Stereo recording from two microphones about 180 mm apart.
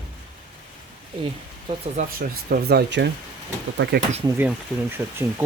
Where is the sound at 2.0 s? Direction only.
55° right (ahead or behind); by 3.9 s 70° right (ahead or behind).